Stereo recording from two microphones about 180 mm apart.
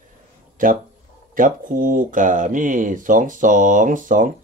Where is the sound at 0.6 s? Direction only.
50° right (ahead or behind).